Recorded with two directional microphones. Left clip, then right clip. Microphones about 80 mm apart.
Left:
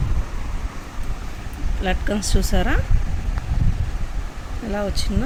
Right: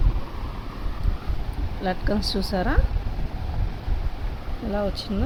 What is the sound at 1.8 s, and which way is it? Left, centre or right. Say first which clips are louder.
Speech: left 2 dB; centre.